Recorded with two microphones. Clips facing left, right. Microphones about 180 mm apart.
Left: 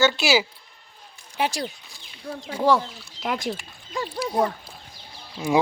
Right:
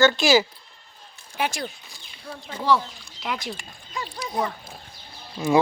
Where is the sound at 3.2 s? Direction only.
45° left (ahead or behind).